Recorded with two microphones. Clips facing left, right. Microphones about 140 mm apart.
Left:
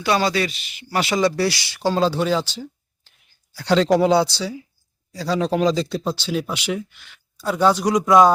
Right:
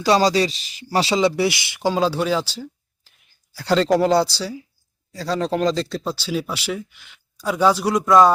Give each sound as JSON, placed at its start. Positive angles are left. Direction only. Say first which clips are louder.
{"t": 0.0, "sound": "speech", "louder": "right 3 dB", "side_deg": -35}
{"t": 1.1, "sound": "speech", "louder": "even", "side_deg": -20}